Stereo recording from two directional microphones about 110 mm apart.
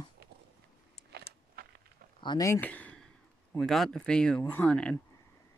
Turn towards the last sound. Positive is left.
turn(degrees=10)  # may be behind; listen again after turning